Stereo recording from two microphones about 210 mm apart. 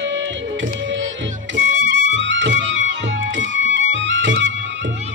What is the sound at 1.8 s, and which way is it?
Music, 60° right (ahead or behind).